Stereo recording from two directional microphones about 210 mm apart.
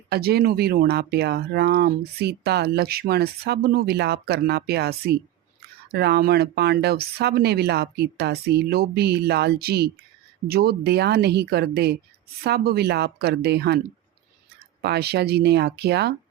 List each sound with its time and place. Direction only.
0.1 s speech: 50° right (ahead or behind)
14.8 s speech: 50° right (ahead or behind)